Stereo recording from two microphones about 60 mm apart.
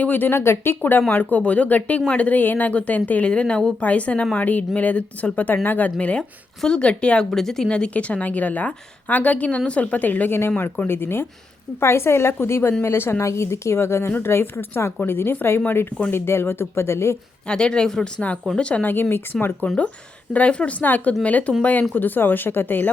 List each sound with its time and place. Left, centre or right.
0.0 s speech: left
0.3 s speech: left; by 7.3 s centre
7.3 s a woman's voice: centre; by 17.2 s left
17.5 s speech: centre
18.9 s speech: left
19.6 s speech: centre; by 22.9 s left